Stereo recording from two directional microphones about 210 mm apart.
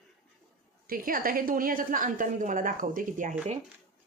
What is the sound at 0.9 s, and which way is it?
A woman's voice, 40° right (ahead or behind).